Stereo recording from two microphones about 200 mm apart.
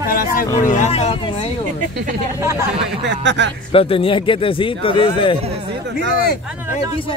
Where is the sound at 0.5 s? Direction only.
35° left (ahead or behind).